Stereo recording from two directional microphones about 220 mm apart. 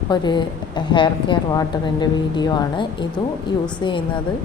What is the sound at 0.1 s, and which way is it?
A woman's voice, 20° left (ahead or behind).